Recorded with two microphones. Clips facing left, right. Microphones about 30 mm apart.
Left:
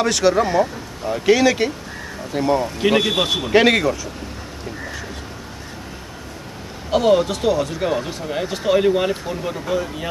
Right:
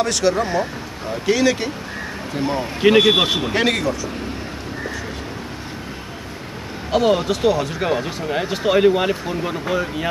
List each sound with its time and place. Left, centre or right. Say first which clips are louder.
0.0 s speech: left 2 dB; centre
2.6 s speech: right 4 dB; centre
3.5 s speech: left 7 dB; centre
6.9 s speech: left 1 dB; centre